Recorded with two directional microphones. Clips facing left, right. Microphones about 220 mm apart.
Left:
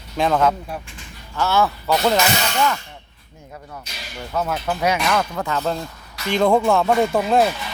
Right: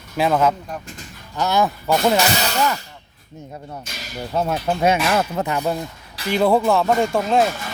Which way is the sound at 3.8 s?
45° right (ahead or behind).